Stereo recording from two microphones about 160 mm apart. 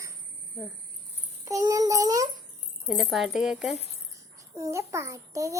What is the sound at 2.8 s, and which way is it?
Speech, centre (ahead or behind).